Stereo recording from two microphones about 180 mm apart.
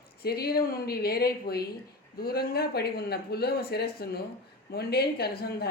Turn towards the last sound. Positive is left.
turn(degrees=60)  # may be behind; listen again after turning